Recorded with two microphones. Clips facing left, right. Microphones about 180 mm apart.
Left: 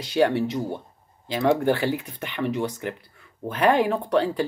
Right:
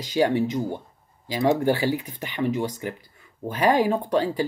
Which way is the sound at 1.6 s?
15° right (ahead or behind).